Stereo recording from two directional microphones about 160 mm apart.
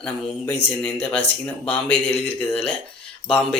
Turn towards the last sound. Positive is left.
turn(degrees=5)  # may be behind; listen again after turning